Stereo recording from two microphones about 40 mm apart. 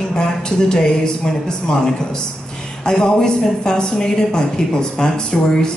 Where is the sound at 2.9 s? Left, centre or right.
Centre.